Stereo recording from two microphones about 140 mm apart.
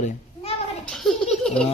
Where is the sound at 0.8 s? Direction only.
5° left (ahead or behind).